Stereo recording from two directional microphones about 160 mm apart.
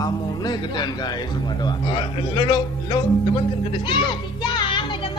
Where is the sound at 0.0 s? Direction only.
25° left (ahead or behind).